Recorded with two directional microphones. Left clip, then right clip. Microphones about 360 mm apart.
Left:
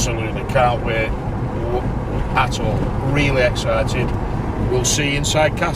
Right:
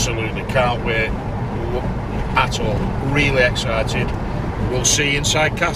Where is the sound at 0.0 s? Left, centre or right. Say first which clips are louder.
Even; centre.